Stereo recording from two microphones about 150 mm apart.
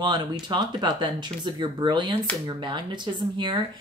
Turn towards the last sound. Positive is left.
turn(degrees=-30)  # may be behind; listen again after turning